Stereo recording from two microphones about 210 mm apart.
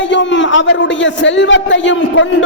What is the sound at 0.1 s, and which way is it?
A man's voice, 60° left (ahead or behind).